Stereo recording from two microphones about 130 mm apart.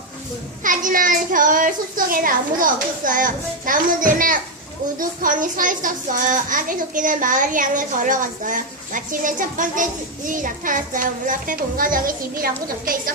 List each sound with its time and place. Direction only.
0.6 s a child's voice: 90° right